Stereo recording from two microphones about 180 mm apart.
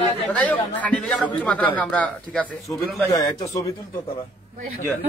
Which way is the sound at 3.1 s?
20° left (ahead or behind).